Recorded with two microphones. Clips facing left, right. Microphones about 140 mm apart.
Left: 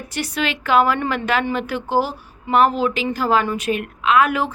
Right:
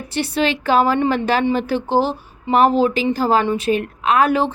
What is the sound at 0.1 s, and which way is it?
Speech, 30° right (ahead or behind).